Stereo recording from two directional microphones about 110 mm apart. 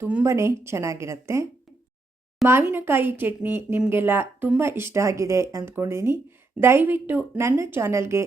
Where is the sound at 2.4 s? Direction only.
20° right (ahead or behind).